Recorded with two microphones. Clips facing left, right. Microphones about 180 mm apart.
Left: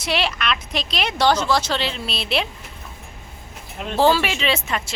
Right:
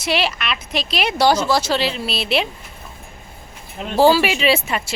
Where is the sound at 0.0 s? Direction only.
5° right (ahead or behind).